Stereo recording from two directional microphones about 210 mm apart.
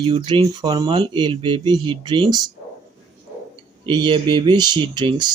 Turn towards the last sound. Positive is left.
turn(degrees=-20)  # may be behind; listen again after turning